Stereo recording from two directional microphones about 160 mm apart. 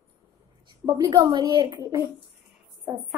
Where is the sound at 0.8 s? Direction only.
25° right (ahead or behind).